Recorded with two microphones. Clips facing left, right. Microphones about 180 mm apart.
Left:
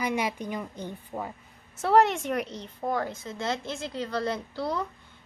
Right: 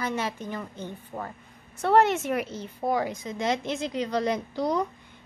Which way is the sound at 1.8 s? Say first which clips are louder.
Right 1 dB; centre (ahead or behind).